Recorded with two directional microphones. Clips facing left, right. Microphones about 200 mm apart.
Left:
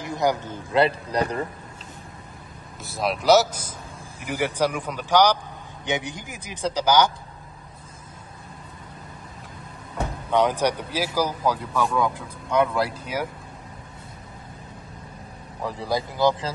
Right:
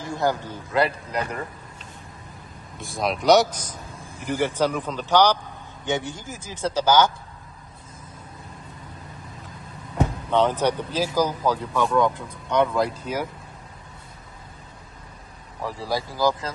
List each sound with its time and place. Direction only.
0.0 s a man's voice: 15° left (ahead or behind)
0.7 s speech: 30° left (ahead or behind)
2.8 s speech: 5° left (ahead or behind)
10.3 s speech: 10° left (ahead or behind)
15.6 s speech: 20° left (ahead or behind)